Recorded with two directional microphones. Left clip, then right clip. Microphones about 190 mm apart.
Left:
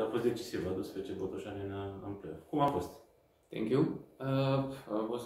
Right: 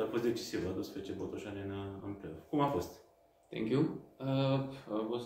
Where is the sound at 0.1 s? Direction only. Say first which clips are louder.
Left 1 dB; 30° right (ahead or behind).